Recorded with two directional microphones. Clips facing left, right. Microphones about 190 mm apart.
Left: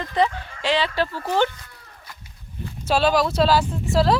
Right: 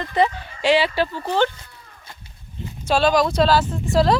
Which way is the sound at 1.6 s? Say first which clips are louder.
Even; 25° right (ahead or behind).